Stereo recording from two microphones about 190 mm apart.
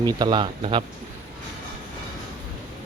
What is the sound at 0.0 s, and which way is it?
Speech, 20° right (ahead or behind).